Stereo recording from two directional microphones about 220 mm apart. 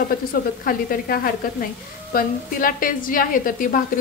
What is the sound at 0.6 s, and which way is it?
A woman's voice, 40° left (ahead or behind).